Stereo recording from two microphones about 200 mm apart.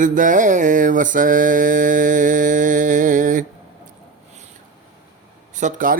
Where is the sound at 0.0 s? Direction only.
40° right (ahead or behind).